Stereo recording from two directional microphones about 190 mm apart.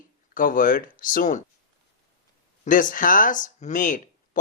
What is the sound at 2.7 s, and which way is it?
Speech, 45° left (ahead or behind).